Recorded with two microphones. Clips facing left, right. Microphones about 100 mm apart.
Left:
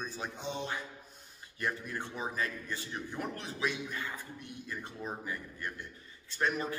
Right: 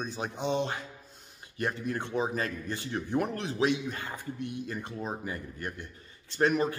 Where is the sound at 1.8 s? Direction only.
70° right (ahead or behind).